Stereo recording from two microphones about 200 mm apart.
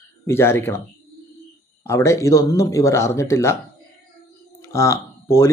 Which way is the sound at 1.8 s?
15° left (ahead or behind).